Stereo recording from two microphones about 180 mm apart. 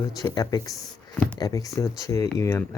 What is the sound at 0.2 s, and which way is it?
Speech, 20° left (ahead or behind).